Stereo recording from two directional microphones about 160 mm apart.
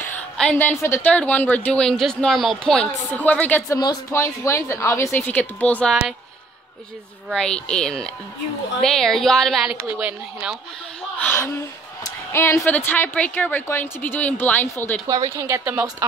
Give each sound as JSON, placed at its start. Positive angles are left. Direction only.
{"t": 0.0, "sound": "a woman's voice", "side_deg": 10}
{"t": 7.2, "sound": "speech", "side_deg": 5}
{"t": 11.1, "sound": "a woman's voice", "side_deg": 15}
{"t": 15.0, "sound": "speech", "side_deg": -20}